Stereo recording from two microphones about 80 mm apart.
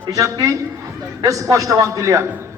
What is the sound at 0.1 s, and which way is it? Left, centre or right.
A man's voice, right.